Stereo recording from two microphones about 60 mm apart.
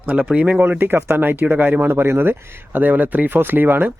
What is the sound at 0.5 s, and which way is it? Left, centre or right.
Speech, right.